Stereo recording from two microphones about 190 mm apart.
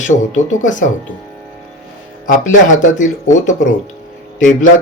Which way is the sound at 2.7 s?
40° left (ahead or behind).